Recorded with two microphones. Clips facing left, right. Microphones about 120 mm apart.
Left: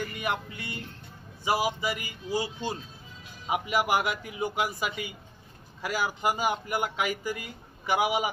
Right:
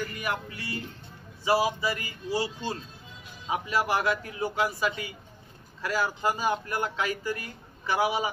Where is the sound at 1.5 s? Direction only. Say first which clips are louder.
Right 2 dB; 20° left (ahead or behind).